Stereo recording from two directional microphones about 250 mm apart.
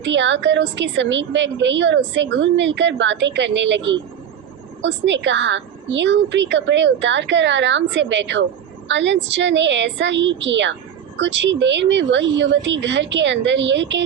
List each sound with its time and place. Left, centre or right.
0.0 s a woman's voice: right